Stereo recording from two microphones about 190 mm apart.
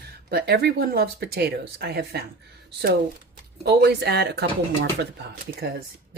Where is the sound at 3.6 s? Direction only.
55° right (ahead or behind).